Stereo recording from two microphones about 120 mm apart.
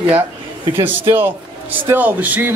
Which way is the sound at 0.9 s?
15° right (ahead or behind).